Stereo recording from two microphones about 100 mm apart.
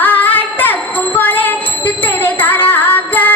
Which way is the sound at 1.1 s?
20° left (ahead or behind).